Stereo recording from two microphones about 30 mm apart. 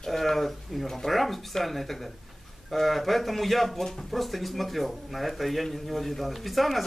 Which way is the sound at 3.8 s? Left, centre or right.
Centre.